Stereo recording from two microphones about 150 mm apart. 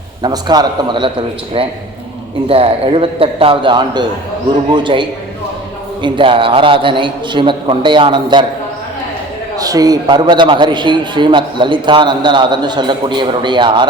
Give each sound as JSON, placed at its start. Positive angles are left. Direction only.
{"t": 0.2, "sound": "a man's voice", "side_deg": -30}
{"t": 2.5, "sound": "a man's voice", "side_deg": -40}
{"t": 9.6, "sound": "a man's voice", "side_deg": -25}